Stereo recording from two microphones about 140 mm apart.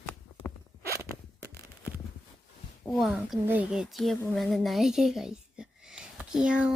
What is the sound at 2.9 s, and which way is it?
Speech, centre (ahead or behind).